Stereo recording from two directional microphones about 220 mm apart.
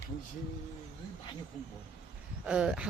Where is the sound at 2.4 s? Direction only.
5° right (ahead or behind).